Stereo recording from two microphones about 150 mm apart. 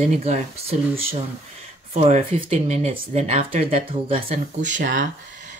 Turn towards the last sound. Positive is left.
turn(degrees=-60)  # may be behind; listen again after turning